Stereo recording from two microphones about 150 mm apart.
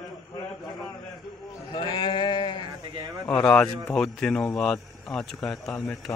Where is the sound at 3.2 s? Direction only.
5° left (ahead or behind).